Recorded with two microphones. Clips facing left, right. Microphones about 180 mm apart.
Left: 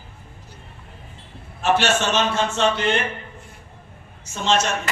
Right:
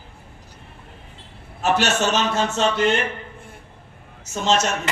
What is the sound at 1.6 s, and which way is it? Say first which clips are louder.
A man's voice: even; 40° right (ahead or behind).